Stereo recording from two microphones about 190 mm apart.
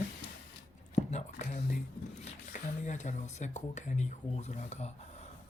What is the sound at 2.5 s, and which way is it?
Speech, 40° left (ahead or behind).